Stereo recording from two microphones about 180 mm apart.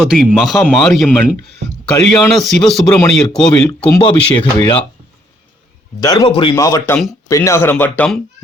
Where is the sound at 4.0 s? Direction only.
30° left (ahead or behind).